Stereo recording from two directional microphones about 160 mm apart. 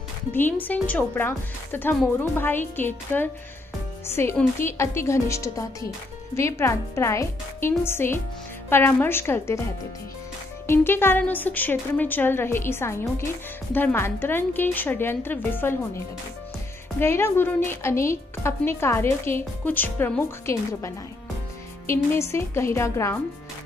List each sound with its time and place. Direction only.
0.3 s a woman's voice: 10° left (ahead or behind)
10.7 s a woman's voice: 15° left (ahead or behind)
17.0 s a woman's voice: 15° left (ahead or behind)